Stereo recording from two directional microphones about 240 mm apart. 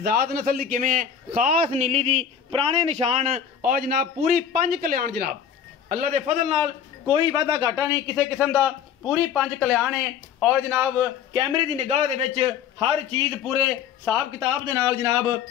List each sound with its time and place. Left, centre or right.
0.0 s a man's voice: right; by 8.2 s centre
8.2 s speech: centre
11.3 s a man's voice: right